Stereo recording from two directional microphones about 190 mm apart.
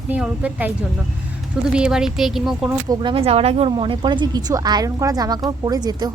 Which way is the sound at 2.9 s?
25° right (ahead or behind).